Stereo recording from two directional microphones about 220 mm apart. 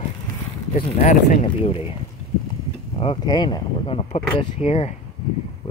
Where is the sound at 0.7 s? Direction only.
35° left (ahead or behind).